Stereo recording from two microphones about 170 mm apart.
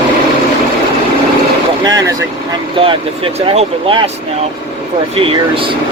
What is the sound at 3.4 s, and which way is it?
Speech, 30° right (ahead or behind).